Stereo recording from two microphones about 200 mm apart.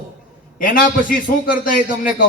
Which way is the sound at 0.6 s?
45° left (ahead or behind).